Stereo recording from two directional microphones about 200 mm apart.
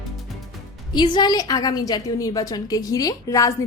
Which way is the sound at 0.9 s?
20° left (ahead or behind).